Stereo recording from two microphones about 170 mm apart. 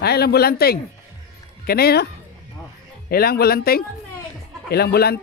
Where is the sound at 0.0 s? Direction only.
70° left (ahead or behind).